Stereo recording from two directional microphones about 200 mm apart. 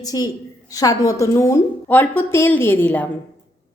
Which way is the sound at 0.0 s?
20° left (ahead or behind).